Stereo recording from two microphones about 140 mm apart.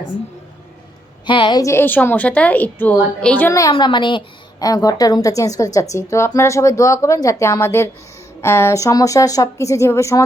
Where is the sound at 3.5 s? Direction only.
25° left (ahead or behind).